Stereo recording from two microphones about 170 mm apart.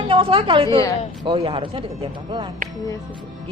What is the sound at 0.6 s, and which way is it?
Speech, 20° left (ahead or behind).